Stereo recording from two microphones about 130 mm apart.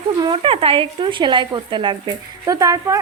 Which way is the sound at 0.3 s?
45° right (ahead or behind).